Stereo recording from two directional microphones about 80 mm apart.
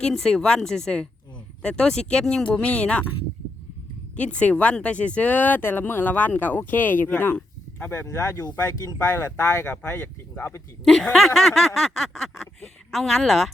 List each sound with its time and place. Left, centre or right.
0.0 s speech: centre
4.2 s speech: centre
8.0 s speech: left
9.1 s speech: left
10.8 s speech: centre